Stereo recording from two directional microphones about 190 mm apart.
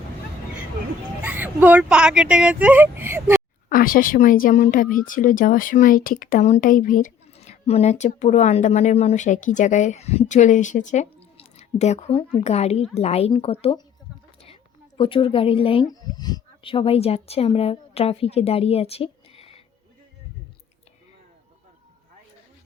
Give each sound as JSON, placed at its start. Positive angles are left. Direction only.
{"t": 1.2, "sound": "speech", "side_deg": -10}
{"t": 3.7, "sound": "a woman's voice", "side_deg": 45}